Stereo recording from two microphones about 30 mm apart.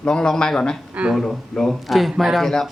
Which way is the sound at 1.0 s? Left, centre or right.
Right.